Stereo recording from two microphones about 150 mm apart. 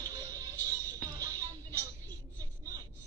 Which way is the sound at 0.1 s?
25° right (ahead or behind).